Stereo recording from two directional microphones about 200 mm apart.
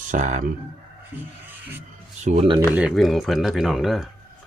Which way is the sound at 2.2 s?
30° right (ahead or behind).